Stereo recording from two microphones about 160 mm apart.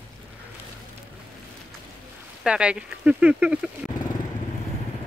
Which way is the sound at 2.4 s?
5° right (ahead or behind).